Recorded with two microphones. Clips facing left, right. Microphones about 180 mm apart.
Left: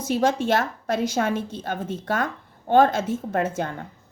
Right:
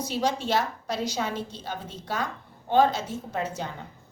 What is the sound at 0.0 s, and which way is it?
A woman's voice, 50° left (ahead or behind).